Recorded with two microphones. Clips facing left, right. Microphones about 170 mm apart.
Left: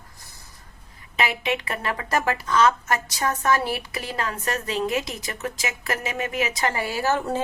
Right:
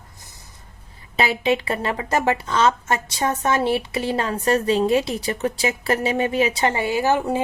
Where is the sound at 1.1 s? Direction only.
30° right (ahead or behind).